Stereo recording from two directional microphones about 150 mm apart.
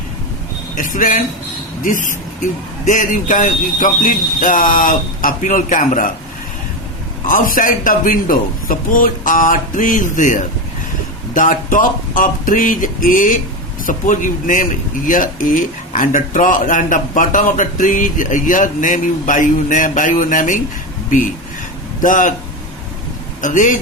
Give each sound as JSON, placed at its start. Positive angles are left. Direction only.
{"t": 0.8, "sound": "speech", "side_deg": 65}
{"t": 7.3, "sound": "speech", "side_deg": 65}
{"t": 22.0, "sound": "speech", "side_deg": 60}
{"t": 23.4, "sound": "speech", "side_deg": 60}